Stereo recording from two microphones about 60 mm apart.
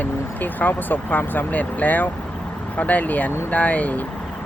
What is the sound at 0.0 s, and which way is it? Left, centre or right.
Speech, left.